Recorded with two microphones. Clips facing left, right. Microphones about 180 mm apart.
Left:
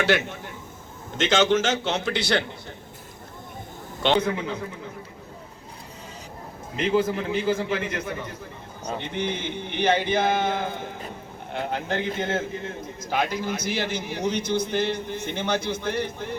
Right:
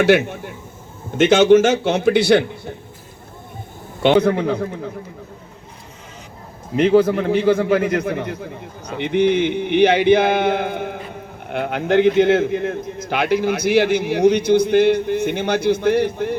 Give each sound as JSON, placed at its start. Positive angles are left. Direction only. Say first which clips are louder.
{"t": 0.0, "sound": "a man's voice", "louder": "right 8 dB", "side_deg": -55}
{"t": 4.0, "sound": "a man's voice", "louder": "right 8 dB", "side_deg": -55}
{"t": 6.7, "sound": "a man's voice", "louder": "right 9 dB", "side_deg": -65}